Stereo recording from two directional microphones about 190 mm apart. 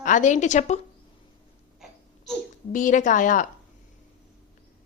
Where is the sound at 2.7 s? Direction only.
45° left (ahead or behind).